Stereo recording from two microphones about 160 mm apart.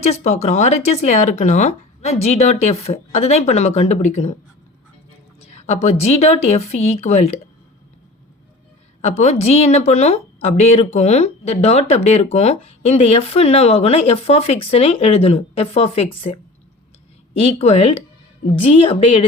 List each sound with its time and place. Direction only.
0.0 s a woman's voice: 45° left (ahead or behind)
5.4 s a woman's voice: 45° left (ahead or behind)
9.0 s a woman's voice: 45° left (ahead or behind)